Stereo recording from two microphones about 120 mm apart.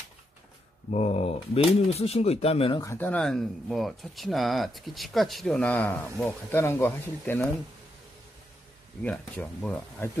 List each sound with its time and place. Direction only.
0.9 s speech: 65° left (ahead or behind)
2.8 s speech: 25° left (ahead or behind)
3.1 s speech: 5° left (ahead or behind)
9.0 s speech: 10° left (ahead or behind)